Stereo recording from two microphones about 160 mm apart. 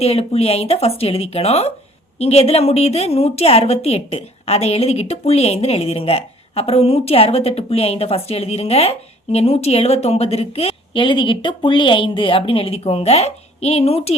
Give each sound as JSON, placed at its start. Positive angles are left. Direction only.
{"t": 0.0, "sound": "a woman's voice", "side_deg": 40}